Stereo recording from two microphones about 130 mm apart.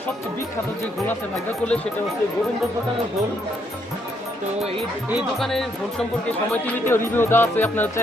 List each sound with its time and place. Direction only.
1.6 s speech: 10° left (ahead or behind)
5.4 s speech: 5° left (ahead or behind)
6.8 s speech: 15° left (ahead or behind)